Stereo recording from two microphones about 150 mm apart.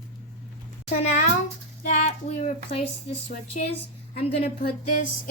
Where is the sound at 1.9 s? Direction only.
55° left (ahead or behind).